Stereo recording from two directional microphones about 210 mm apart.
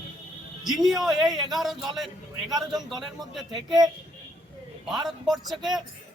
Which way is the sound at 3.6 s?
20° right (ahead or behind).